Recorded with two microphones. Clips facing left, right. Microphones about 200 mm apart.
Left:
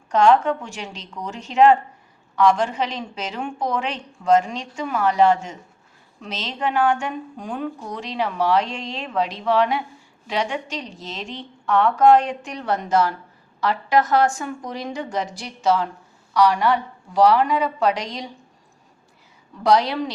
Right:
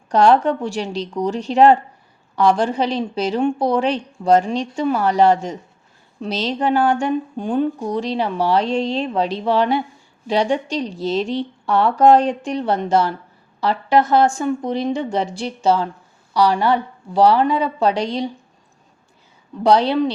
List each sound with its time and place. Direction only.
0.1 s a woman's voice: 35° right (ahead or behind)
19.6 s speech: 30° right (ahead or behind)